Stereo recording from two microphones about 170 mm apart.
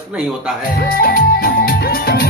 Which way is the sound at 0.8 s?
60° left (ahead or behind).